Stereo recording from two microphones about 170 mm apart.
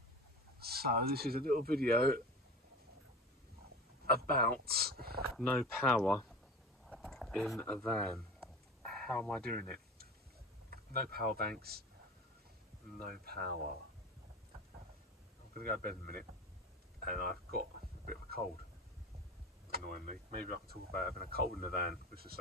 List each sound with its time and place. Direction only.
0.6 s speech: 65° right (ahead or behind)
4.0 s speech: 65° right (ahead or behind)
5.4 s speech: 5° left (ahead or behind)
10.7 s speech: 65° right (ahead or behind)
13.0 s speech: 60° right (ahead or behind)
15.5 s speech: 60° right (ahead or behind)
17.0 s a sound: 55° right (ahead or behind)
19.7 s speech: 60° right (ahead or behind)